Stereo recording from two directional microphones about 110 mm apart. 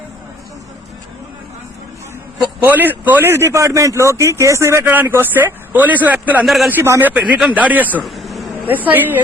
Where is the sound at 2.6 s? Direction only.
15° right (ahead or behind).